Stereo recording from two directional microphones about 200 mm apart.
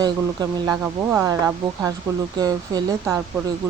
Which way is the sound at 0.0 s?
20° right (ahead or behind).